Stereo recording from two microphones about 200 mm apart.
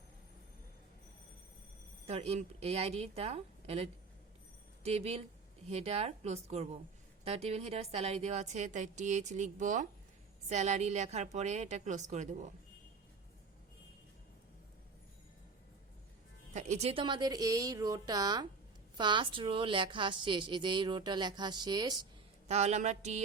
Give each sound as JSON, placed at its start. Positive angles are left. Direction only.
{"t": 2.0, "sound": "a woman's voice", "side_deg": -30}
{"t": 16.6, "sound": "a woman's voice", "side_deg": -35}
{"t": 22.4, "sound": "a woman's voice", "side_deg": -35}